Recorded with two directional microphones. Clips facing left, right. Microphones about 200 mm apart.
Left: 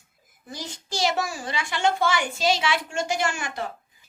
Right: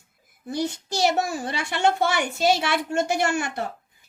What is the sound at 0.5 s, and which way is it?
A child's voice, 60° right (ahead or behind).